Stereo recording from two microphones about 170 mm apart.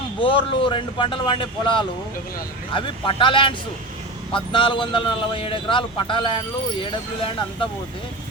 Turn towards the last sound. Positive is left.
turn(degrees=30)  # may be behind; listen again after turning